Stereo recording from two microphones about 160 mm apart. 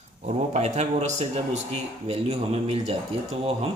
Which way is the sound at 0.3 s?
45° right (ahead or behind).